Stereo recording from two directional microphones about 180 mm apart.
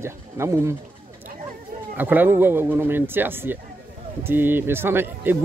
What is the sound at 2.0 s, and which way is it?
Speech, 10° right (ahead or behind).